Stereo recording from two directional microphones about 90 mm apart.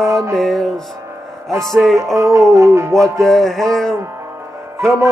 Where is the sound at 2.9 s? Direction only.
5° left (ahead or behind).